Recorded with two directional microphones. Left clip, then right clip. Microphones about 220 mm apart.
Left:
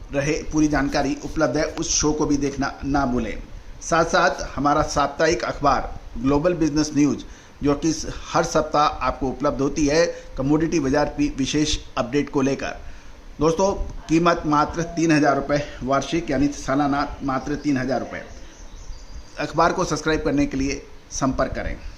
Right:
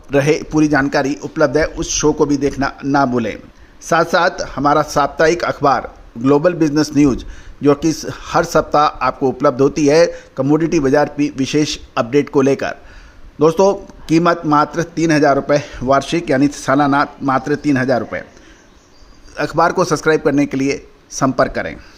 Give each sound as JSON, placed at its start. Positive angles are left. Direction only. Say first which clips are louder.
{"t": 0.1, "sound": "a man's voice", "louder": "right 9 dB", "side_deg": -45}
{"t": 19.4, "sound": "a man's voice", "louder": "right 6 dB", "side_deg": -35}